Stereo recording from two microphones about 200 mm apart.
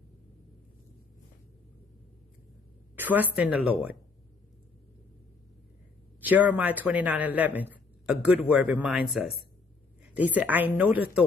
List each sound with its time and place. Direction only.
3.0 s a sound: 10° right (ahead or behind)
3.3 s speech: 5° right (ahead or behind)
6.2 s speech: 10° right (ahead or behind)